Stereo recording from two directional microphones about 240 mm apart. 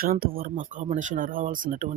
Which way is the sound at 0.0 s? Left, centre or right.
Right.